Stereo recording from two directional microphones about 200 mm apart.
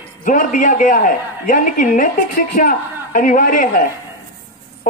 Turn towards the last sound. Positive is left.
turn(degrees=45)  # may be behind; listen again after turning